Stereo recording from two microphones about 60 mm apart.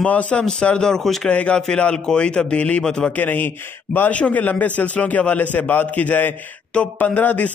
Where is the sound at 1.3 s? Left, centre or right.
Centre.